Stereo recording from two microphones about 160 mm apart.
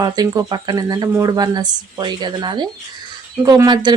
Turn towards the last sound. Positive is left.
turn(degrees=-25)  # may be behind; listen again after turning